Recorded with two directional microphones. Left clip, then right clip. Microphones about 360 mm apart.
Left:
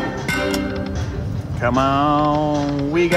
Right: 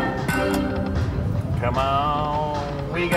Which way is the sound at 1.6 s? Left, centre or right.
Left.